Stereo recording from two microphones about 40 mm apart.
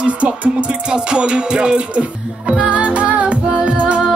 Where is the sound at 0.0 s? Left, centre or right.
Right.